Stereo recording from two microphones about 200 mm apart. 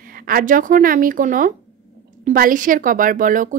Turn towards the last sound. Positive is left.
turn(degrees=-40)  # may be behind; listen again after turning